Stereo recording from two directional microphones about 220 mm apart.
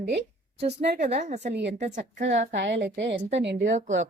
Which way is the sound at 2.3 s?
55° right (ahead or behind).